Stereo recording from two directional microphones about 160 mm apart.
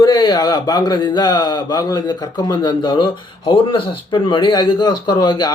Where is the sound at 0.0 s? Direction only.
25° left (ahead or behind).